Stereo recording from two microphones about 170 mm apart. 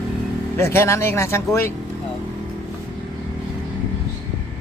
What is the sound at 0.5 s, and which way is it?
Speech, 15° left (ahead or behind).